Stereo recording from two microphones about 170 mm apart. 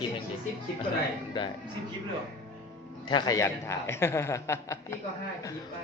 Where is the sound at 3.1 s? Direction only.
20° left (ahead or behind).